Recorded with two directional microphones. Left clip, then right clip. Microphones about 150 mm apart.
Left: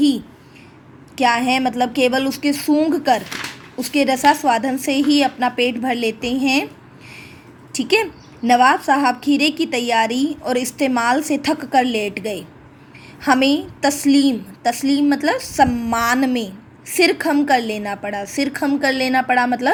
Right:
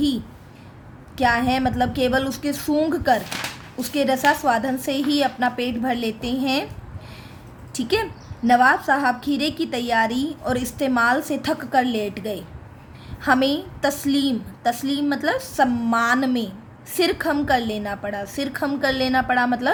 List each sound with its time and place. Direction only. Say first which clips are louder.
1.1 s a woman's voice: left 3 dB; 15° left (ahead or behind)
7.7 s a woman's voice: left 5 dB; 15° left (ahead or behind)